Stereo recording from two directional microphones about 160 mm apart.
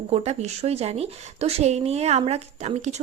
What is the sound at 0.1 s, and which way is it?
A woman's voice, 40° right (ahead or behind).